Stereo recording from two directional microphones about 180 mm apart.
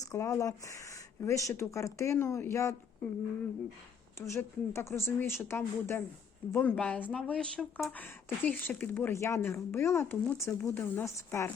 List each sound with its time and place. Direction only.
0.0 s speech: 20° left (ahead or behind)
4.2 s speech: 15° left (ahead or behind)